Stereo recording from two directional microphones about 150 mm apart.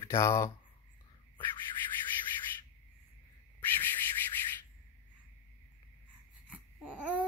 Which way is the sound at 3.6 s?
10° left (ahead or behind).